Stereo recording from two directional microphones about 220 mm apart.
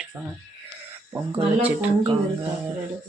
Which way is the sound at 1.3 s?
25° right (ahead or behind).